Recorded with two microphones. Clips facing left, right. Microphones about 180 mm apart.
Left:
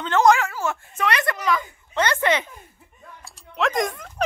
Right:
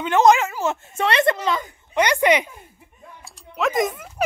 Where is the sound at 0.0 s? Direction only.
20° right (ahead or behind).